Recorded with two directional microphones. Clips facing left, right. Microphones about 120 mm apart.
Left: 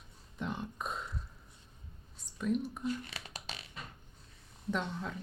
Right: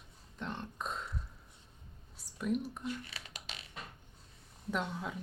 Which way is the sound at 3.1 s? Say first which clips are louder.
Left 3 dB; 30° left (ahead or behind).